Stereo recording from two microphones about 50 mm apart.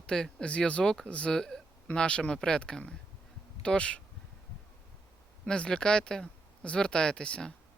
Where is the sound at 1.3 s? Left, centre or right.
Centre.